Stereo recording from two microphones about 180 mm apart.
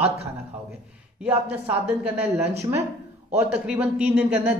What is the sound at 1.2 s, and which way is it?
A man's voice, 5° right (ahead or behind).